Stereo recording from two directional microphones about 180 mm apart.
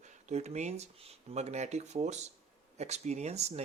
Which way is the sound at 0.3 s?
40° right (ahead or behind).